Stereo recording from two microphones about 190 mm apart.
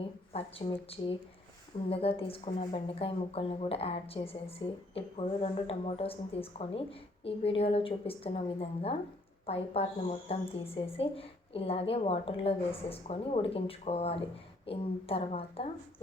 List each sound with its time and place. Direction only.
0.3 s a woman's voice: 30° left (ahead or behind)